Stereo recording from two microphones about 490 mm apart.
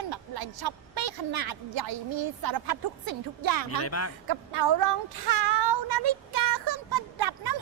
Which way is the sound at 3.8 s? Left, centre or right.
Left.